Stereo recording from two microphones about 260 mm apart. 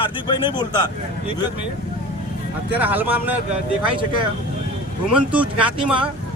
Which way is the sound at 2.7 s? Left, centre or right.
Centre.